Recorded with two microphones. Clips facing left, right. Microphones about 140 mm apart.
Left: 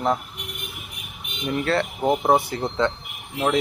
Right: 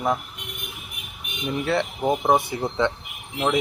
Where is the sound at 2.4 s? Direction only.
20° right (ahead or behind).